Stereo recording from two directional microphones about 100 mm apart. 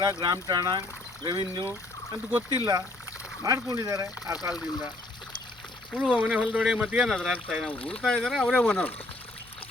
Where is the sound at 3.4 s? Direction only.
35° right (ahead or behind).